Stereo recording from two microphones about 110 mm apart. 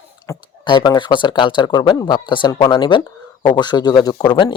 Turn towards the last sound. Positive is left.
turn(degrees=45)  # may be behind; listen again after turning